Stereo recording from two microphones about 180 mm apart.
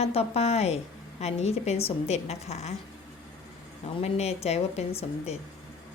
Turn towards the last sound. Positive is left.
turn(degrees=35)  # may be behind; listen again after turning